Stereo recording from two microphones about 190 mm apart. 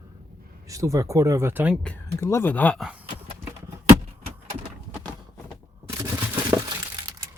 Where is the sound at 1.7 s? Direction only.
5° left (ahead or behind).